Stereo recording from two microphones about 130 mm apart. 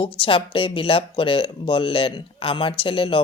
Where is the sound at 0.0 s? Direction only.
45° left (ahead or behind).